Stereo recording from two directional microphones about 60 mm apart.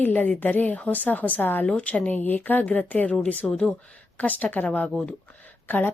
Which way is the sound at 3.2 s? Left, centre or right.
Centre.